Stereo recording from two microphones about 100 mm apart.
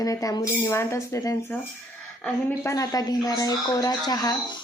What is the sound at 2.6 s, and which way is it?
Speech, 35° left (ahead or behind).